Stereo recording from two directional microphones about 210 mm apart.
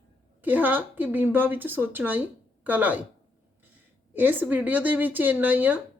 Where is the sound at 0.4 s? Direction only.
10° right (ahead or behind).